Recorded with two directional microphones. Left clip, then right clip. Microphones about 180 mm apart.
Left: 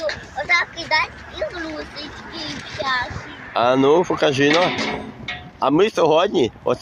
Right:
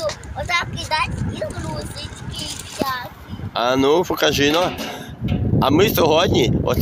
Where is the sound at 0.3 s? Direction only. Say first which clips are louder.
Left 4 dB; 30° right (ahead or behind).